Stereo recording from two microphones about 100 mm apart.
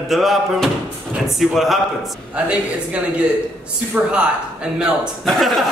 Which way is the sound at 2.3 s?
10° right (ahead or behind).